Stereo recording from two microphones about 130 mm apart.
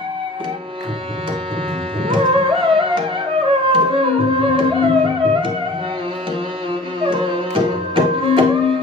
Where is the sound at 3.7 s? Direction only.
40° right (ahead or behind).